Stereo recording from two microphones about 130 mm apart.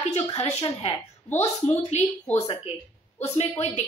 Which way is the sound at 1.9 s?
60° left (ahead or behind).